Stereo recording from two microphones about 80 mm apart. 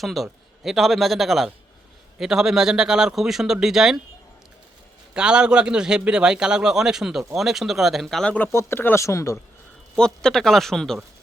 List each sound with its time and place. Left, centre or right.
0.0 s speech: centre
5.1 s a man's voice: centre
8.2 s speech: centre
8.5 s speech: left
9.9 s speech: centre